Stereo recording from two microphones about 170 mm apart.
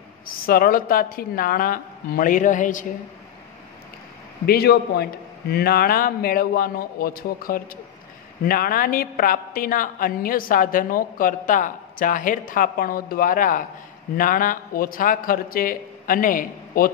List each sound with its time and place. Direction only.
0.4 s a woman's voice: 60° left (ahead or behind)
4.5 s a man's voice: 70° left (ahead or behind)